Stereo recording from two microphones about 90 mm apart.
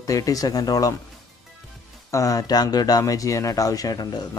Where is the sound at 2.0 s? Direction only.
35° left (ahead or behind).